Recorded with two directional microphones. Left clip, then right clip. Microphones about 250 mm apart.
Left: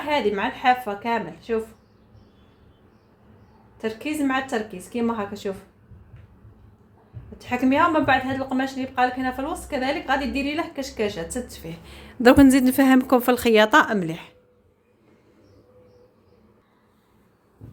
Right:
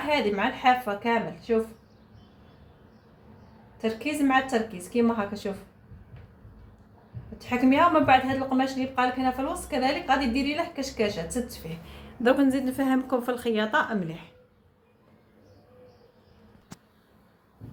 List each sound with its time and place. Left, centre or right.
0.1 s a woman's voice: left
3.8 s a woman's voice: left
7.3 s a woman's voice: left